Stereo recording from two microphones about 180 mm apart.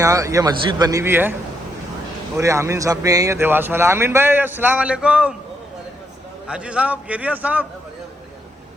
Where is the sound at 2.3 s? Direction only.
15° right (ahead or behind).